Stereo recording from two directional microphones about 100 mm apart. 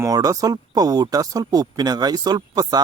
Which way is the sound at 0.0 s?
35° right (ahead or behind).